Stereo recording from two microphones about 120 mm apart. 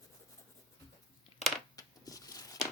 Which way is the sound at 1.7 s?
30° left (ahead or behind).